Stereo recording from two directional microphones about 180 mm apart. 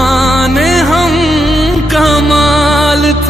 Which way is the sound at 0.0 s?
Centre (ahead or behind).